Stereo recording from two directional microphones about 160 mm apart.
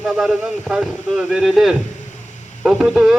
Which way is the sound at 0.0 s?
Centre (ahead or behind).